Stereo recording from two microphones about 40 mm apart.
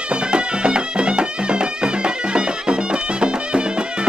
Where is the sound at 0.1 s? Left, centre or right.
Right.